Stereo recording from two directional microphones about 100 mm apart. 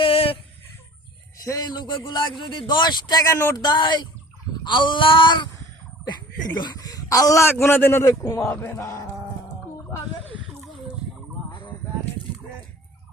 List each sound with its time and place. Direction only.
0.0 s a sound: 65° left (ahead or behind)
1.5 s a man's voice: 40° left (ahead or behind)
3.2 s speech: 30° left (ahead or behind)
3.6 s a man's voice: 50° left (ahead or behind)
6.6 s speech: 45° left (ahead or behind)
7.5 s speech: 20° left (ahead or behind)
11.5 s a sound: 50° left (ahead or behind)